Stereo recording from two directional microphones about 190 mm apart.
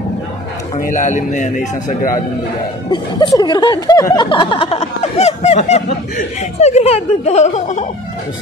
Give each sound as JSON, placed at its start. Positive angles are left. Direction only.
{"t": 0.7, "sound": "a man's voice", "side_deg": 45}
{"t": 2.9, "sound": "a man's voice", "side_deg": 20}